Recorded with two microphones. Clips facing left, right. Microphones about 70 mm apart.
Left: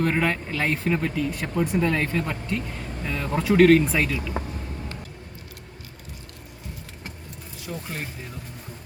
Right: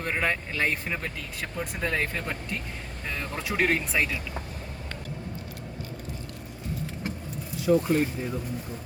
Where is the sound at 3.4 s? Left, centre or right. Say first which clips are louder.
Left 11 dB; centre.